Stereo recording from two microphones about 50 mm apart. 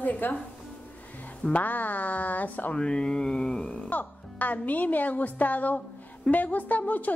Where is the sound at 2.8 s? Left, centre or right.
Centre.